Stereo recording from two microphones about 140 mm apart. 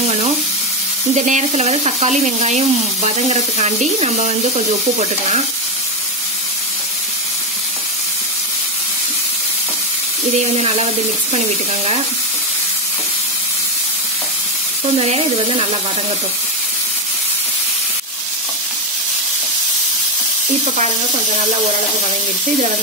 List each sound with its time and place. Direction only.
1.1 s speech: 60° right (ahead or behind)
11.3 s speech: 50° right (ahead or behind)
15.0 s speech: 45° right (ahead or behind)